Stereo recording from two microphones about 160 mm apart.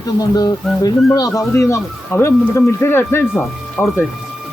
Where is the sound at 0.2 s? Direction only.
25° left (ahead or behind).